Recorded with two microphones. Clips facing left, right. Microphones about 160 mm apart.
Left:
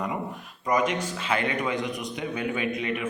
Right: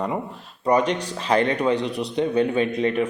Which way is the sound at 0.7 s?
35° right (ahead or behind).